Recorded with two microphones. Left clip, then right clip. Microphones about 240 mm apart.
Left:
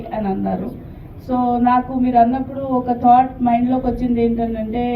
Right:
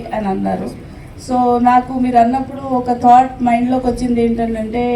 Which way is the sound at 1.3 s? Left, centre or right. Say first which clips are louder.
Right 4 dB; right.